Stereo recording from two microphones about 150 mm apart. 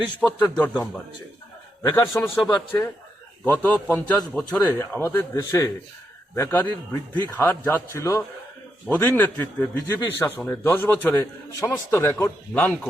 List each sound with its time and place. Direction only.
0.2 s a man's voice: 5° left (ahead or behind)
2.0 s a man's voice: 15° left (ahead or behind)